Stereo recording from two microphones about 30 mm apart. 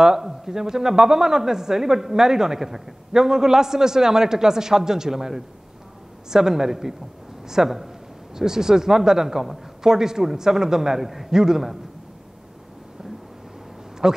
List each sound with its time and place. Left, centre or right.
0.0 s speech: centre
14.0 s speech: centre